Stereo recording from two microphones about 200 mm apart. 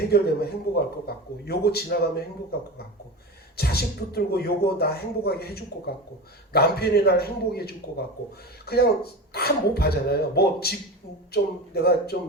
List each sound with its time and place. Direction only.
0.1 s a man's voice: 50° left (ahead or behind)
3.6 s a man's voice: 50° left (ahead or behind)